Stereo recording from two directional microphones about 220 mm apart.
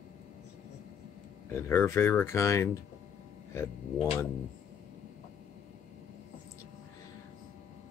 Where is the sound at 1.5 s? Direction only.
10° left (ahead or behind).